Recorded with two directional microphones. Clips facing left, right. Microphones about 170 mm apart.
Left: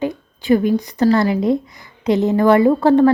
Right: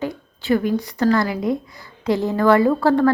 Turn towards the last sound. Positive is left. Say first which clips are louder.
# left 4 dB
turn(degrees=20)  # may be behind; listen again after turning